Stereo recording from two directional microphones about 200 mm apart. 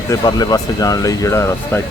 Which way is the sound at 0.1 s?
20° left (ahead or behind).